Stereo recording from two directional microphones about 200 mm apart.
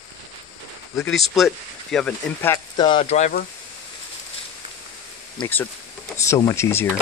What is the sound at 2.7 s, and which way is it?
Speech, 25° left (ahead or behind).